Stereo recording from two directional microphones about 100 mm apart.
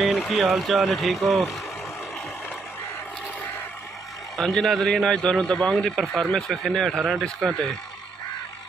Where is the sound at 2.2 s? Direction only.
15° left (ahead or behind).